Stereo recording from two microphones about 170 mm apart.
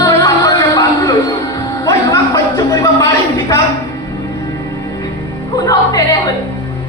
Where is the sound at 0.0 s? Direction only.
20° left (ahead or behind).